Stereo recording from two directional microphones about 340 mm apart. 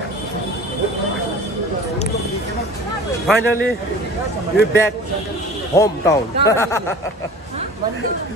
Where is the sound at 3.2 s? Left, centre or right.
Centre.